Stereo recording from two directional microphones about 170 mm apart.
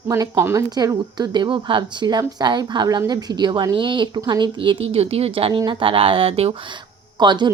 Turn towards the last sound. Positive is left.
turn(degrees=-25)  # may be behind; listen again after turning